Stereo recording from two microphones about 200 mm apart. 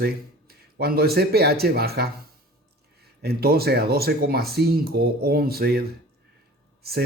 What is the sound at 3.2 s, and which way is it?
Speech, 50° right (ahead or behind).